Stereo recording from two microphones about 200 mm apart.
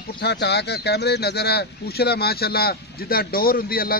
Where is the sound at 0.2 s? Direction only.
55° left (ahead or behind).